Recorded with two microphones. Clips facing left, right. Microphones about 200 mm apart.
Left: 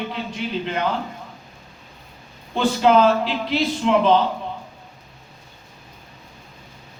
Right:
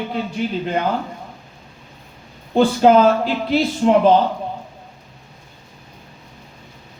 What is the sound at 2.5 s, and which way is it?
A man's voice, 45° right (ahead or behind).